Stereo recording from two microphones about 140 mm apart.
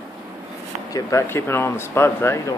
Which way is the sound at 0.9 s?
20° left (ahead or behind).